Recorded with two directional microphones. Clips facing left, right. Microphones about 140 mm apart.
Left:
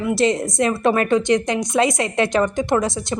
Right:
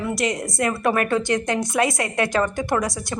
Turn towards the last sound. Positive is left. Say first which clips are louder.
# left 4 dB
turn(degrees=25)  # may be behind; listen again after turning